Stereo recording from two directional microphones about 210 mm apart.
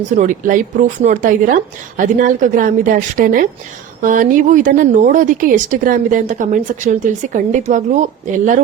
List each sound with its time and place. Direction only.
0.2 s a woman's voice: 40° right (ahead or behind)